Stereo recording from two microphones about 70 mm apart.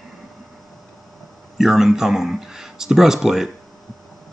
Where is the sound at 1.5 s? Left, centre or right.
Centre.